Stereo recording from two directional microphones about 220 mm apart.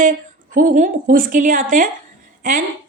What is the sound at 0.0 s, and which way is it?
A woman's voice, 35° right (ahead or behind).